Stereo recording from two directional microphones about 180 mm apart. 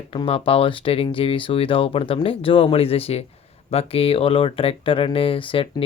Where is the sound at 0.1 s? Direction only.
30° left (ahead or behind).